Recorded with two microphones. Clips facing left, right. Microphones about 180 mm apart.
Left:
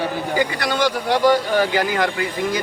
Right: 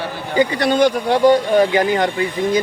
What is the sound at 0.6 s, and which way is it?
Speech, 30° right (ahead or behind).